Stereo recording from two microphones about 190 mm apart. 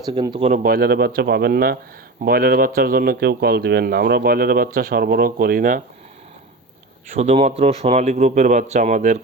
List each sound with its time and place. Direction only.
0.0 s speech: 20° right (ahead or behind)
0.4 s speech: 45° right (ahead or behind)
7.2 s a man's voice: 35° right (ahead or behind)